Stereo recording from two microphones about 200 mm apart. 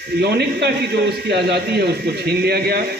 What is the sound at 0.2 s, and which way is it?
A man's voice, 55° right (ahead or behind).